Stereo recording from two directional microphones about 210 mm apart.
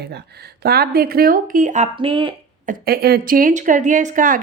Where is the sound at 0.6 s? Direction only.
50° right (ahead or behind); by 2.3 s 25° right (ahead or behind).